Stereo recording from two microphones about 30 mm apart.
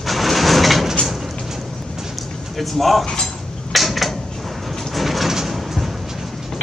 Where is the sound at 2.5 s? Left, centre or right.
Centre.